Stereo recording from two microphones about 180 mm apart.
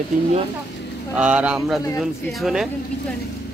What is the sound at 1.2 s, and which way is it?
Speech, 5° right (ahead or behind).